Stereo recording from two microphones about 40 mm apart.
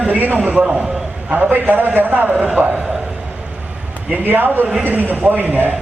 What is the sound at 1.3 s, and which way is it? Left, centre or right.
A man's voice, right.